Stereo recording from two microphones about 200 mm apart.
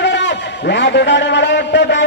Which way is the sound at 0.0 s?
60° left (ahead or behind).